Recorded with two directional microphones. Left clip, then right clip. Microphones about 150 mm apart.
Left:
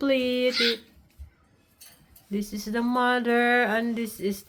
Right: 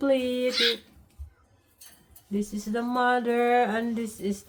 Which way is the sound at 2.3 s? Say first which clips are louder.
Even; 25° left (ahead or behind).